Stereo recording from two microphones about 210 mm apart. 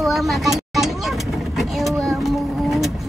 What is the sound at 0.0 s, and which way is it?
Vehicle, centre (ahead or behind).